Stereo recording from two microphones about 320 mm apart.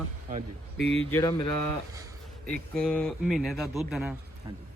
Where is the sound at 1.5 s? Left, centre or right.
Left.